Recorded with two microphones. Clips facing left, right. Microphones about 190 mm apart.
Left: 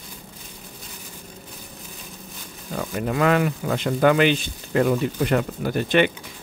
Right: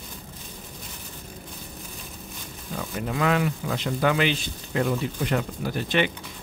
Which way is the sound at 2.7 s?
55° left (ahead or behind).